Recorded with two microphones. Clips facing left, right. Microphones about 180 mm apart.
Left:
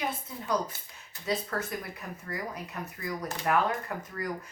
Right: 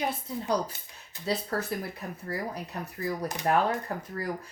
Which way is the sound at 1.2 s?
35° right (ahead or behind).